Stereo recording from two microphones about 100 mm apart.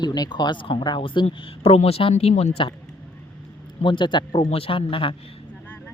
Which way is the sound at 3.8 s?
55° left (ahead or behind).